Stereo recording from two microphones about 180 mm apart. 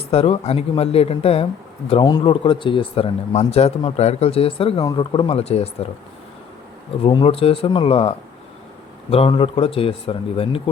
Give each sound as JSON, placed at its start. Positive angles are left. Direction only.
{"t": 0.1, "sound": "speech", "side_deg": 35}
{"t": 7.0, "sound": "speech", "side_deg": 30}